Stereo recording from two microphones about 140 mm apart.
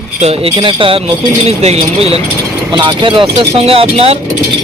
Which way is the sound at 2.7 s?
35° right (ahead or behind).